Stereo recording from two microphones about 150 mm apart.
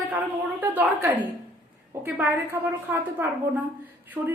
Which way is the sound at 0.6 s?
10° right (ahead or behind).